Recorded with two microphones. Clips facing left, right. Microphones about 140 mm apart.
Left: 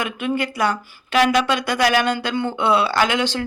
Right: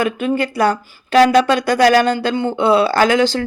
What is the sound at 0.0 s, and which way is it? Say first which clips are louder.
Speech: right 5 dB; 35° right (ahead or behind).